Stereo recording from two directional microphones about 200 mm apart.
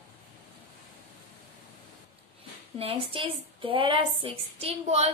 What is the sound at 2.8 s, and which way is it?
A woman's voice, 30° right (ahead or behind).